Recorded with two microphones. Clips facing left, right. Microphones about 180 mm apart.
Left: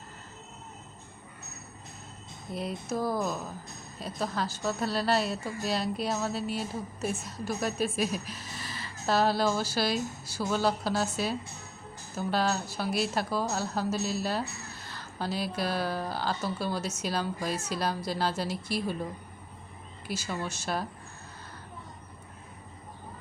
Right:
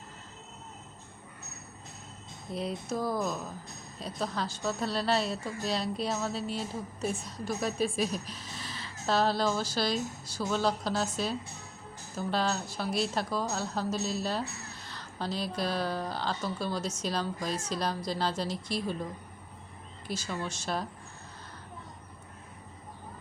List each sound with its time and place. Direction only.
2.5 s a woman's voice: centre (ahead or behind)
20.1 s speech: 10° left (ahead or behind)